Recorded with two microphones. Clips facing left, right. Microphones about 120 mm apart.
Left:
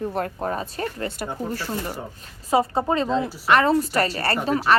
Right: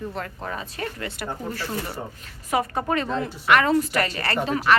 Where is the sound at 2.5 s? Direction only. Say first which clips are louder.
Left 3 dB; 30° left (ahead or behind).